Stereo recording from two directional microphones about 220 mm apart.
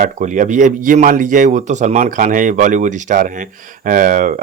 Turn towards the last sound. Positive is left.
turn(degrees=-40)  # may be behind; listen again after turning